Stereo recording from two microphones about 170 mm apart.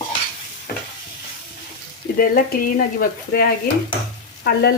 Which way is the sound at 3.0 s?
60° left (ahead or behind).